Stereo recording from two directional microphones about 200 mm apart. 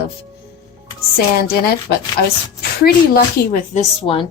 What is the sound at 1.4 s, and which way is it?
Speech, 50° left (ahead or behind).